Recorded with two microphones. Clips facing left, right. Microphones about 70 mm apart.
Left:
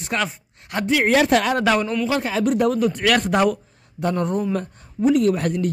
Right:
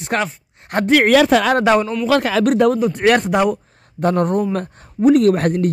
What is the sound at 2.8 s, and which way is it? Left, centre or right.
Speech, right.